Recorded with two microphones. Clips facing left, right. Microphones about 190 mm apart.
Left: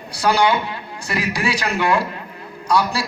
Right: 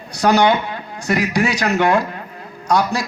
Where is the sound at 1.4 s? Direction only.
45° right (ahead or behind).